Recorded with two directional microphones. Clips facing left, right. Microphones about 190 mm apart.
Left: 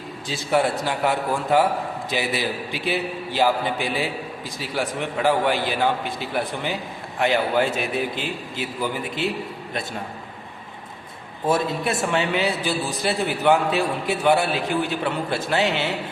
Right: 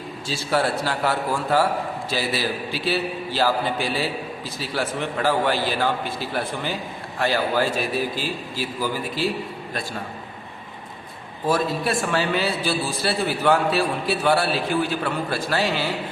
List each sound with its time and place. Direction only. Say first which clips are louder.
0.3 s a man's voice: left 1 dB; 20° left (ahead or behind)
11.4 s a man's voice: even; 25° left (ahead or behind)